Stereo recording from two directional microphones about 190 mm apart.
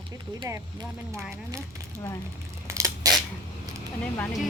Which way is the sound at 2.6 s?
15° right (ahead or behind).